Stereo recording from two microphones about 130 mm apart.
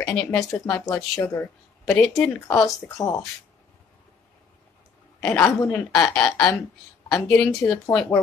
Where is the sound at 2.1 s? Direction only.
25° left (ahead or behind).